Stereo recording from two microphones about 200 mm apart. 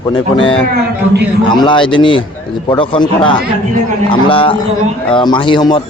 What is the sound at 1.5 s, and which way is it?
Speech, 25° left (ahead or behind).